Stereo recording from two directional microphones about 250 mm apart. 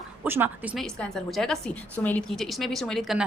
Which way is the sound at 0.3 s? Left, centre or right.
Centre.